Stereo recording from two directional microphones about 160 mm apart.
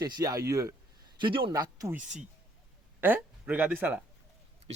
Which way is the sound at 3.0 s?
15° right (ahead or behind).